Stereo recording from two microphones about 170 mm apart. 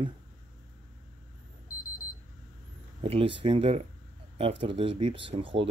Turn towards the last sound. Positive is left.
turn(degrees=-30)  # may be behind; listen again after turning